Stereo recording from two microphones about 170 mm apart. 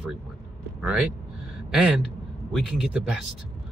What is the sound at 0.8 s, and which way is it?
A man's voice, 5° right (ahead or behind).